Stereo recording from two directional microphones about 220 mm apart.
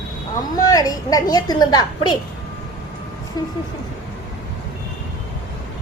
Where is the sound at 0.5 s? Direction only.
15° left (ahead or behind).